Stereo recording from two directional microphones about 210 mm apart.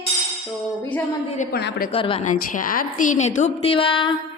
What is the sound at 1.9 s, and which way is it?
Speech, 25° left (ahead or behind).